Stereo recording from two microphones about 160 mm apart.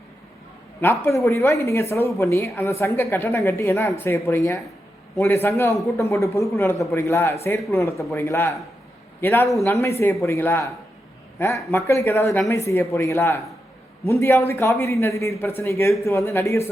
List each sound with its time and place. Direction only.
0.8 s speech: 15° left (ahead or behind)